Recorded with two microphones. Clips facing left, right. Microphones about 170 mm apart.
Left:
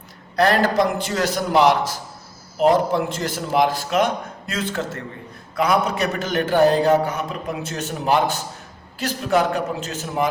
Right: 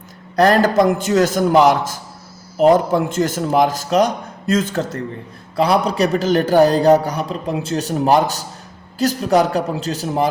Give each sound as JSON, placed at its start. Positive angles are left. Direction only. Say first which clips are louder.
{"t": 0.3, "sound": "a man's voice", "louder": "right 4 dB", "side_deg": -45}